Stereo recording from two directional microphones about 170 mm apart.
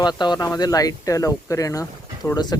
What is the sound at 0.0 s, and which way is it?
Speech, 25° left (ahead or behind).